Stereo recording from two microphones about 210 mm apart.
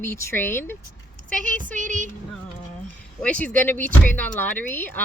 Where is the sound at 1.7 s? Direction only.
35° right (ahead or behind).